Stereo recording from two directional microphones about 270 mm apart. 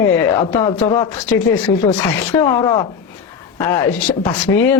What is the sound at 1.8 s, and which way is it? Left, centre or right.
Speech, centre.